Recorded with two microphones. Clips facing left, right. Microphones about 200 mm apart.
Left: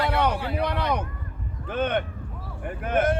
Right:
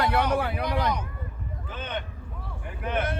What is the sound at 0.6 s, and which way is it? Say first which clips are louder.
Speech: left 1 dB; 60° left (ahead or behind).